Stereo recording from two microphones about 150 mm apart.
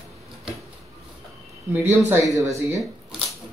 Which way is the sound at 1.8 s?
20° right (ahead or behind).